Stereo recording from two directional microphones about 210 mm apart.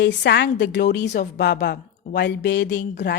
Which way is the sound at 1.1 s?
35° left (ahead or behind).